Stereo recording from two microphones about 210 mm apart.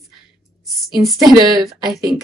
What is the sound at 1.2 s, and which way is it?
Speech, 20° right (ahead or behind).